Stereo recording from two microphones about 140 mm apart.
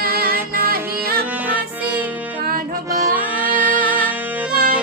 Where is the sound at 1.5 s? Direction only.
10° right (ahead or behind).